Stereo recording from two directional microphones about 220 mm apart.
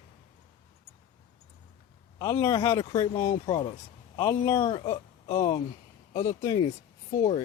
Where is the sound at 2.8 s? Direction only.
25° left (ahead or behind).